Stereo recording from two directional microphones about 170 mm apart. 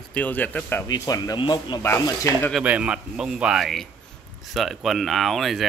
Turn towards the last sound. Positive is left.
turn(degrees=0)  # may be behind; listen again after turning